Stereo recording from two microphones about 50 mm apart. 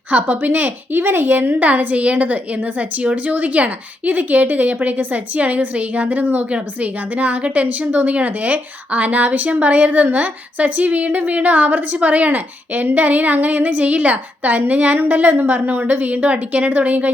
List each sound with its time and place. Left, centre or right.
0.1 s a woman's voice: right
3.0 s a woman's voice: right